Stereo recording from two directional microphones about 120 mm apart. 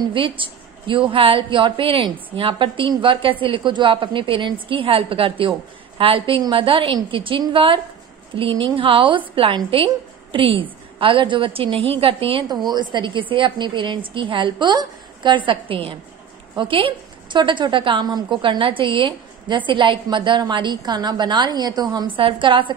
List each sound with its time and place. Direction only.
0.1 s a woman's voice: 45° right (ahead or behind)